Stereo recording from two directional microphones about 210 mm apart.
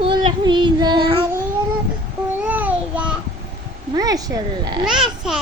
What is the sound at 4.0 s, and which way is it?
Speech, 15° right (ahead or behind).